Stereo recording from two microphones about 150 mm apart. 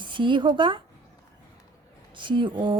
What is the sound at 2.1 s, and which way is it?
Speech, 35° right (ahead or behind).